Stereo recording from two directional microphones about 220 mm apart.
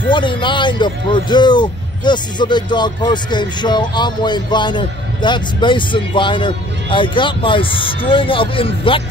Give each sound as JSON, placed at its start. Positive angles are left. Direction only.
{"t": 0.1, "sound": "speech", "side_deg": 20}